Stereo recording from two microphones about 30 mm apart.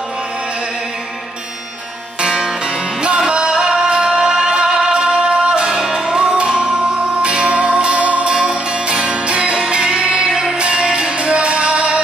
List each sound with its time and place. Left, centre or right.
3.3 s music: right
5.7 s music: centre